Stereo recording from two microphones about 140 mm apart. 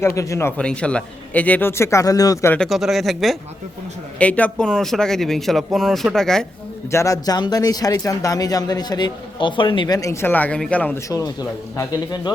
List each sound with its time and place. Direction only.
0.2 s speech: 20° left (ahead or behind)
2.5 s a man's voice: 5° left (ahead or behind)
6.9 s speech: 25° left (ahead or behind)
11.1 s speech: 25° left (ahead or behind)